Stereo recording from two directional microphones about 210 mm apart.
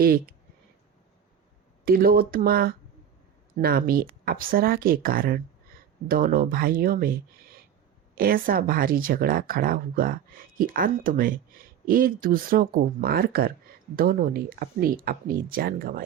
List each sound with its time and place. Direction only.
0.0 s speech: 45° right (ahead or behind)
1.8 s speech: 45° right (ahead or behind)